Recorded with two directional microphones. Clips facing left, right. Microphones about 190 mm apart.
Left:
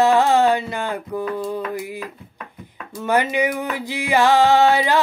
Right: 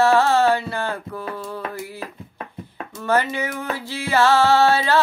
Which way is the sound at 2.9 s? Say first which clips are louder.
Left 2 dB; 15° left (ahead or behind).